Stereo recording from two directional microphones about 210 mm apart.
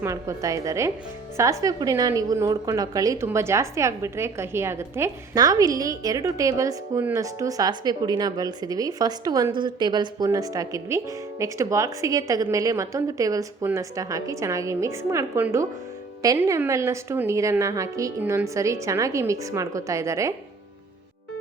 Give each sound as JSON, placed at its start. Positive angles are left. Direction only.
{"t": 0.0, "sound": "a woman's voice", "side_deg": -15}